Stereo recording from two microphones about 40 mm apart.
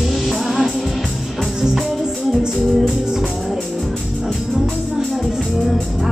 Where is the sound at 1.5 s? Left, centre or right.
Centre.